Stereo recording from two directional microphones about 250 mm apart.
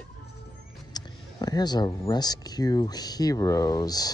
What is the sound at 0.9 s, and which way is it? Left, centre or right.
Speech, centre.